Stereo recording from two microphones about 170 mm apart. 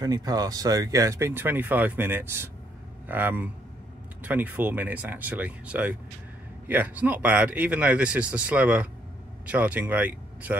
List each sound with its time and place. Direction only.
0.0 s speech: 20° right (ahead or behind)